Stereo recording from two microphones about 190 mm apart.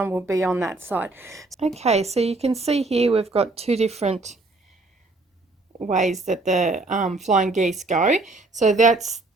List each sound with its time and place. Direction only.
0.0 s a woman's voice: 10° right (ahead or behind)
1.5 s a woman's voice: 35° right (ahead or behind)
5.8 s a woman's voice: 40° right (ahead or behind)